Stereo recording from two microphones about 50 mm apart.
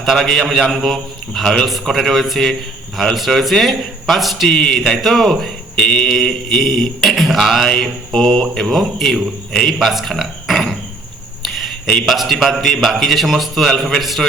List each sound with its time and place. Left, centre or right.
0.0 s mantra: centre
4.5 s mantra: centre
4.9 s mantra: centre
5.7 s mantra: centre
9.7 s a sound: centre
12.0 s mantra: centre